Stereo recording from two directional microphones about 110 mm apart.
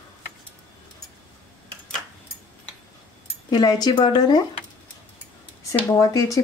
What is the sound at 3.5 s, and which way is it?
Speech, 40° left (ahead or behind).